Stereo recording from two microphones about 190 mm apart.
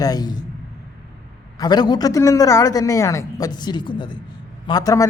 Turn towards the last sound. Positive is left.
turn(degrees=20)  # may be behind; listen again after turning